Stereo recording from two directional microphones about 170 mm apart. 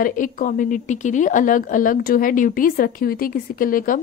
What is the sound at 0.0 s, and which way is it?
A woman's voice, 55° left (ahead or behind).